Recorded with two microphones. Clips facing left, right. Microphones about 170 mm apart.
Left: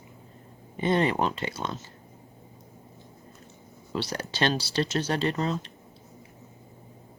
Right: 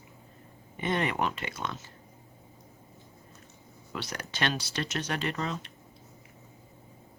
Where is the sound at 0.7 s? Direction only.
30° left (ahead or behind).